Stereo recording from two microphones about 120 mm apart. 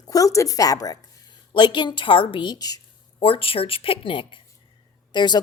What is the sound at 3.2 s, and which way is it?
A woman's voice, 50° left (ahead or behind).